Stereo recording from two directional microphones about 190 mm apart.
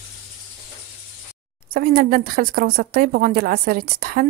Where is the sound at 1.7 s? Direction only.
50° right (ahead or behind).